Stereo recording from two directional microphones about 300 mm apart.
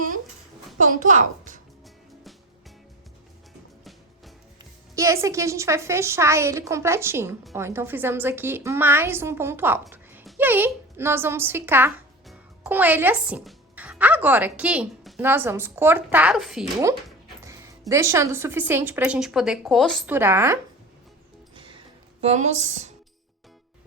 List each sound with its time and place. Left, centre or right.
0.8 s a woman's voice: right
4.9 s a woman's voice: centre
21.5 s music: centre
22.2 s speech: right